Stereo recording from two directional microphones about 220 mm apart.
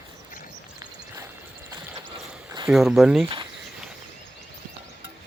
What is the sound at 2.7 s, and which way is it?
Speech, centre (ahead or behind).